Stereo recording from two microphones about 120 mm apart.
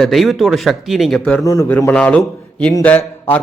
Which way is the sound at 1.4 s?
25° left (ahead or behind).